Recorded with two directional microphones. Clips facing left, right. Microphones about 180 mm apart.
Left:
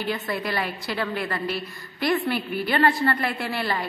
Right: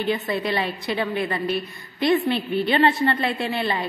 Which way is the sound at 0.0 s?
20° right (ahead or behind).